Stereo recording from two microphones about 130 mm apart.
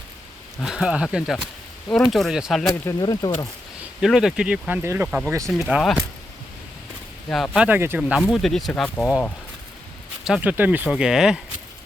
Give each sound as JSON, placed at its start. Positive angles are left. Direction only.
{"t": 0.6, "sound": "speech", "side_deg": -5}
{"t": 3.0, "sound": "speech", "side_deg": 30}
{"t": 4.0, "sound": "speech", "side_deg": -5}
{"t": 5.5, "sound": "speech", "side_deg": -5}
{"t": 7.3, "sound": "speech", "side_deg": 5}
{"t": 7.5, "sound": "speech", "side_deg": -10}
{"t": 10.6, "sound": "speech", "side_deg": -15}